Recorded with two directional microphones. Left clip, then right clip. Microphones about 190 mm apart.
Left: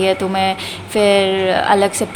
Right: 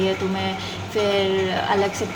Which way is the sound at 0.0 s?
55° left (ahead or behind).